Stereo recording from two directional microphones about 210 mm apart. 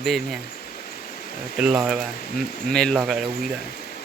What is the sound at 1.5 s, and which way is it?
Speech, 5° right (ahead or behind).